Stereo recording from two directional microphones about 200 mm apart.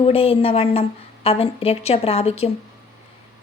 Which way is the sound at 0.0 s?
30° left (ahead or behind).